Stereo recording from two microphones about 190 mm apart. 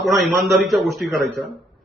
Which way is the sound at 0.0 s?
Centre (ahead or behind).